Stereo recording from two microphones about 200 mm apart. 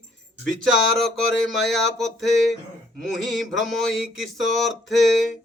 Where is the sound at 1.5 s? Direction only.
Centre (ahead or behind).